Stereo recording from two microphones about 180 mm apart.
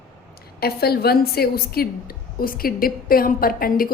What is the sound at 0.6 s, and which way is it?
A woman's voice, 60° left (ahead or behind).